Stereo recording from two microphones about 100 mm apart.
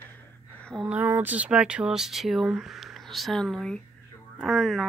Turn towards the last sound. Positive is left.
turn(degrees=0)  # may be behind; listen again after turning